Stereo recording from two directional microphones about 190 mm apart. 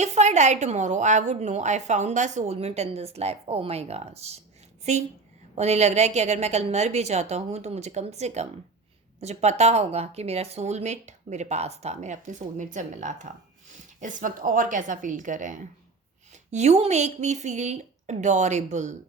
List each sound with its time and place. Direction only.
0.0 s a woman's voice: 35° right (ahead or behind)